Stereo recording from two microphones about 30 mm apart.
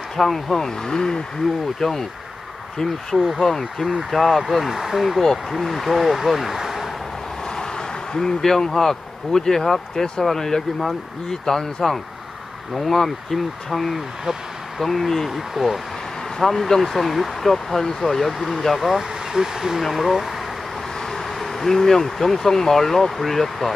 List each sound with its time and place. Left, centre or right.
0.2 s speech: centre
0.8 s speech: left
1.8 s speech: centre
3.3 s speech: centre
4.4 s speech: centre
6.6 s a sound: centre
7.5 s vehicle: left
8.4 s speech: centre
15.2 s speech: centre
16.3 s speech: centre
18.9 s speech: centre
19.8 s speech: centre
21.0 s speech: centre